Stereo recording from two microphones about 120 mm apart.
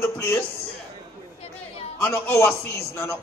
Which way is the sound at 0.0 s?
20° left (ahead or behind).